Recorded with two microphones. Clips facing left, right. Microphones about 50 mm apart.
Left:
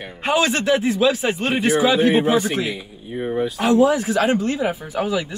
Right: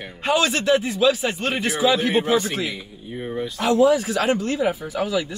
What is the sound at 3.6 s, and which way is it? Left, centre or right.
Speech, left.